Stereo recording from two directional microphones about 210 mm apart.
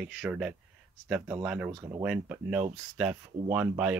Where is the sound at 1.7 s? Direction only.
20° right (ahead or behind).